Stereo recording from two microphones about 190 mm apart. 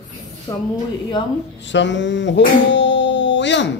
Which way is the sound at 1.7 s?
70° left (ahead or behind).